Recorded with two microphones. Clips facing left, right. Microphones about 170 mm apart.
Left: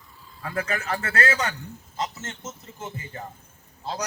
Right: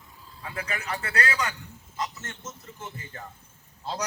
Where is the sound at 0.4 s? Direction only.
50° left (ahead or behind).